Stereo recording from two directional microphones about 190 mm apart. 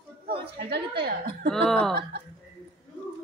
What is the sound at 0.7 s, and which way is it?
Speech, 60° right (ahead or behind).